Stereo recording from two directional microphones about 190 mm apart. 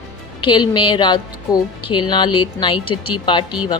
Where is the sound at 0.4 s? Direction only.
25° left (ahead or behind).